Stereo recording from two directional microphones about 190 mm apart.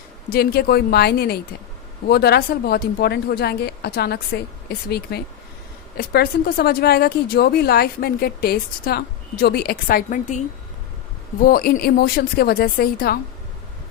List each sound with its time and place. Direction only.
0.3 s speech: 55° left (ahead or behind)
11.4 s a woman's voice: 50° left (ahead or behind)